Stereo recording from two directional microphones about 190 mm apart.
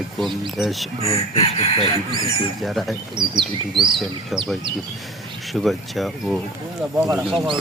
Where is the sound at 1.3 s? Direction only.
30° left (ahead or behind).